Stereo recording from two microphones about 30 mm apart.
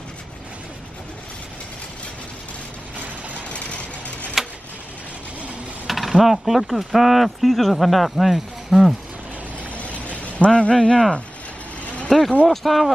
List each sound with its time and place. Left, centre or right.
3.4 s vehicle: left
5.9 s speech: centre
9.8 s a sound: left
10.7 s speech: left
11.8 s vehicle: left
12.1 s speech: centre